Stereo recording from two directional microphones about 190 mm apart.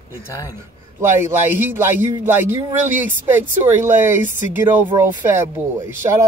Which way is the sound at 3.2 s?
10° right (ahead or behind).